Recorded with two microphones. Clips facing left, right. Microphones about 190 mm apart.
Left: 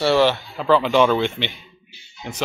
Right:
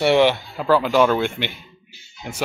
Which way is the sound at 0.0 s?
15° right (ahead or behind).